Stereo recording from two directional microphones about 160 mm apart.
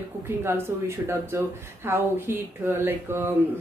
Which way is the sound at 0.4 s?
15° right (ahead or behind).